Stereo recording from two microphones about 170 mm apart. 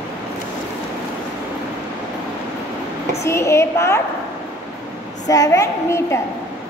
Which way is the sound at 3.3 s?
15° left (ahead or behind).